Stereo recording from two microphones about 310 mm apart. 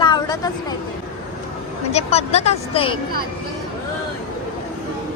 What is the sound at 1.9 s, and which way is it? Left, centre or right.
Speech, centre.